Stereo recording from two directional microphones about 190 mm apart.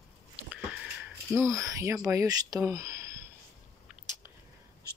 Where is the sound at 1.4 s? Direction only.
15° right (ahead or behind).